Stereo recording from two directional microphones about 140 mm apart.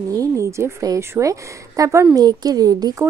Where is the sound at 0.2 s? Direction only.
20° right (ahead or behind).